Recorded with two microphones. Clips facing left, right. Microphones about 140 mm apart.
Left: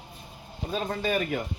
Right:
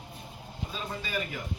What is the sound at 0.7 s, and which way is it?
Speech, 60° left (ahead or behind).